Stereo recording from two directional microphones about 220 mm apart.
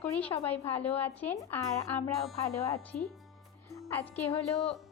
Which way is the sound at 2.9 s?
40° left (ahead or behind).